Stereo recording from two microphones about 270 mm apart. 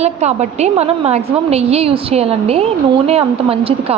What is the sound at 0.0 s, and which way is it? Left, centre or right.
A woman's voice, right.